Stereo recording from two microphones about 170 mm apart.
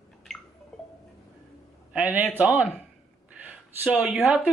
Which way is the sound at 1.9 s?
10° right (ahead or behind).